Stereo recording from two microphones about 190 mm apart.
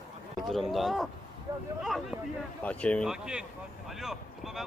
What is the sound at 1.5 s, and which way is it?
Speech, 20° right (ahead or behind).